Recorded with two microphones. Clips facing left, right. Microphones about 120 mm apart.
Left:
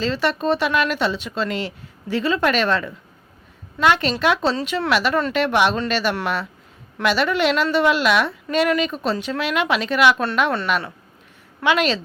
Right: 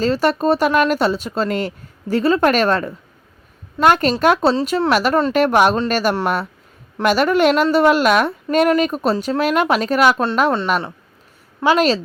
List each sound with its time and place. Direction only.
0.0 s a woman's voice: 40° right (ahead or behind)